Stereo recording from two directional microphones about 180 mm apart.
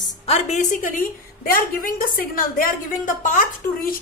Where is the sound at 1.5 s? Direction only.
55° left (ahead or behind).